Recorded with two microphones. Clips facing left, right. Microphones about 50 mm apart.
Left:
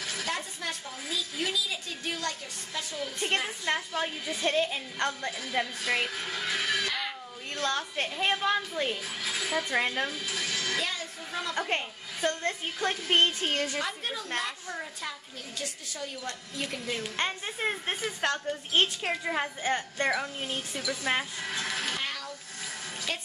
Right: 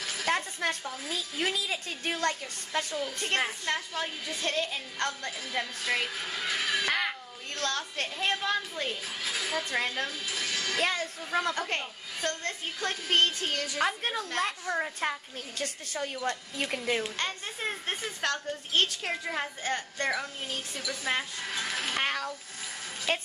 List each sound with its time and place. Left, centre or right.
0.3 s a woman's voice: right
3.6 s a woman's voice: centre
6.9 s a sound: right
7.5 s a woman's voice: centre
9.2 s speech: centre
10.2 s music: centre
10.8 s speech: right
11.5 s a woman's voice: centre
13.7 s a woman's voice: right
17.2 s a woman's voice: centre
22.0 s a sound: right
23.1 s a woman's voice: right